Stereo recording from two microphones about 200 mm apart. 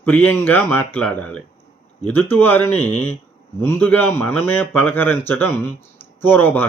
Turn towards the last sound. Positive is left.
turn(degrees=10)  # may be behind; listen again after turning